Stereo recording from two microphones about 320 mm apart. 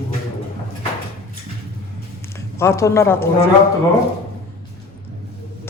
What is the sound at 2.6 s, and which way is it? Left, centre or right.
Speech, centre.